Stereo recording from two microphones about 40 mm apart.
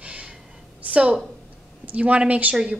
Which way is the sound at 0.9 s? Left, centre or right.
Right.